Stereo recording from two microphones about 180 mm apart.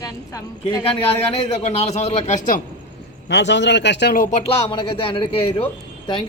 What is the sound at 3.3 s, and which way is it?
Speech, 75° left (ahead or behind).